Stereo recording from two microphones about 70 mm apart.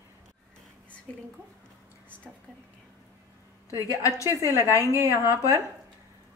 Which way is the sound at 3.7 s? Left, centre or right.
Left.